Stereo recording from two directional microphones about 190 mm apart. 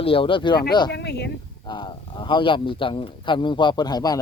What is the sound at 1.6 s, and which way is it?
A man's voice, 25° left (ahead or behind).